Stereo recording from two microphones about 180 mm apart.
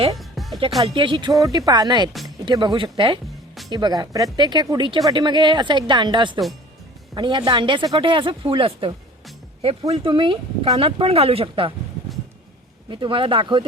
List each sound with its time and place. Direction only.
0.2 s music: centre (ahead or behind)
0.8 s speech: 25° right (ahead or behind)
12.9 s speech: 25° right (ahead or behind)